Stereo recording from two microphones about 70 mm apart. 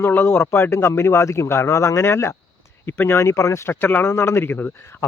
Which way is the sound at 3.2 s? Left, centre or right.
Left.